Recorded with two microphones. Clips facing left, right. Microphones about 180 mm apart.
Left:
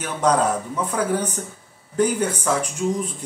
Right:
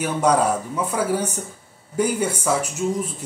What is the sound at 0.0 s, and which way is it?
Speech, 10° right (ahead or behind).